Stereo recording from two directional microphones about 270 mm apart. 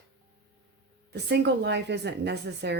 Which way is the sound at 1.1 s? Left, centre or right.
Right.